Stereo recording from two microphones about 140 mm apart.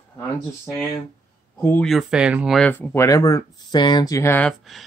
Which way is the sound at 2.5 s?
10° left (ahead or behind).